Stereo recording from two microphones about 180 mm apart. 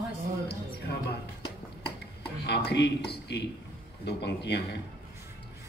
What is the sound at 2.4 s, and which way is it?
A man's voice, 65° left (ahead or behind).